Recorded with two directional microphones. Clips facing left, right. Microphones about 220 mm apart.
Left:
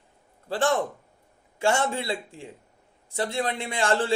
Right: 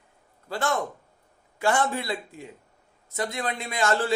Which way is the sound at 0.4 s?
30° left (ahead or behind).